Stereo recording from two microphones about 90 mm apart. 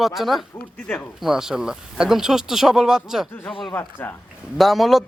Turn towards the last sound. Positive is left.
turn(degrees=0)  # may be behind; listen again after turning